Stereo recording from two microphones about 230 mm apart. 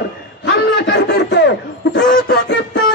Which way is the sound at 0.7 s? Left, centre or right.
Left.